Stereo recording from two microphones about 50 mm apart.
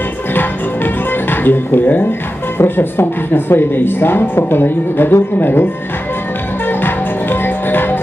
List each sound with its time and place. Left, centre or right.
1.3 s speech: left
6.7 s music: left